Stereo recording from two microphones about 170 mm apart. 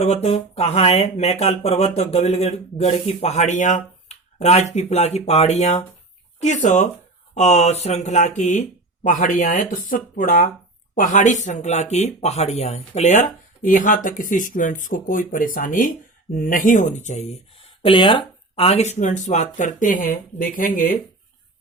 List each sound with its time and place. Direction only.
0.0 s speech: 40° left (ahead or behind)